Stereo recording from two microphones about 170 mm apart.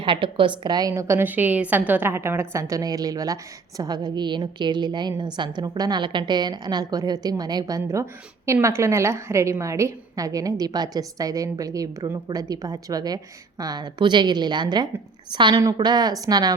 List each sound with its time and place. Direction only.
0.0 s a woman's voice: 30° right (ahead or behind)